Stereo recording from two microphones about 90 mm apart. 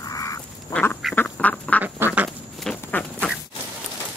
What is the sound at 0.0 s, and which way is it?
Duck, 40° left (ahead or behind).